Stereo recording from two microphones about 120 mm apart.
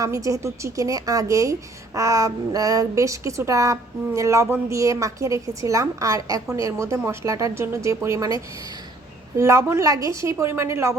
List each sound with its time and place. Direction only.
0.0 s speech: 30° right (ahead or behind)